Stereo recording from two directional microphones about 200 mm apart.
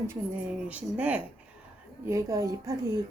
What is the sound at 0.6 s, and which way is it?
Speech, 5° right (ahead or behind).